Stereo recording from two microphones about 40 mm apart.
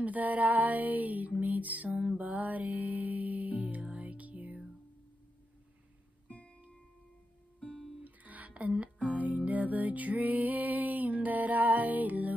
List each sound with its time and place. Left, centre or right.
0.0 s female singing: right
6.2 s music: left
8.0 s music: right